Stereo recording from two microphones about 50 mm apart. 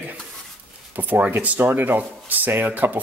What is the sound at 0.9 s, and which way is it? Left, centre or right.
Speech, right.